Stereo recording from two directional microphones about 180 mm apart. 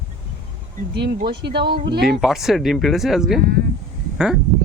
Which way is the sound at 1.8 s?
65° right (ahead or behind).